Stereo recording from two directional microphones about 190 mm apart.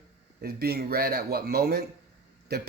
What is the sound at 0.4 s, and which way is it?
A man's voice, 55° right (ahead or behind).